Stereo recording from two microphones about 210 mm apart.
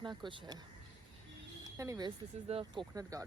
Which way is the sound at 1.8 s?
15° right (ahead or behind).